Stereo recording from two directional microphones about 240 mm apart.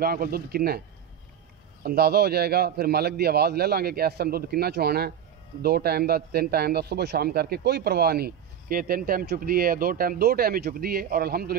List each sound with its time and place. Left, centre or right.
0.0 s a man's voice: right